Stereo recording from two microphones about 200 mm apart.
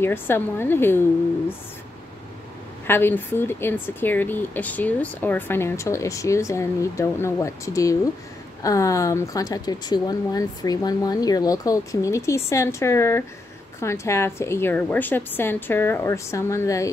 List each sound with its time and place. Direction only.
0.0 s speech: 10° left (ahead or behind)
2.9 s speech: 10° left (ahead or behind)